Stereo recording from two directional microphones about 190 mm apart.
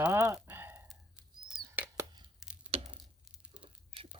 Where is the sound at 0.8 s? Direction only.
Centre (ahead or behind).